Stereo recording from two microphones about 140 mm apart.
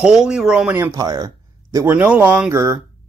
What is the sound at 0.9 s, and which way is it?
Speech, 30° right (ahead or behind).